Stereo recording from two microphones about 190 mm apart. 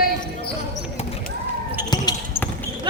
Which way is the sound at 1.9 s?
20° left (ahead or behind).